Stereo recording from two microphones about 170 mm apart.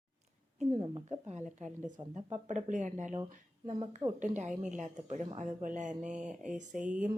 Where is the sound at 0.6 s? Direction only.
30° right (ahead or behind).